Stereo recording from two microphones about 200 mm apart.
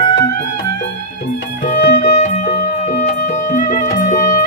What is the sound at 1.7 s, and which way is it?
Music, 40° left (ahead or behind).